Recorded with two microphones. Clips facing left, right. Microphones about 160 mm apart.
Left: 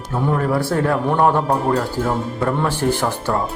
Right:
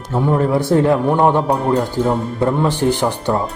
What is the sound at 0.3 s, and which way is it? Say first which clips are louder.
Speech: right 6 dB; 20° right (ahead or behind).